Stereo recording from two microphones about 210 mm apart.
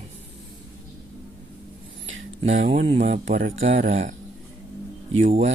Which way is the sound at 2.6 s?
50° right (ahead or behind).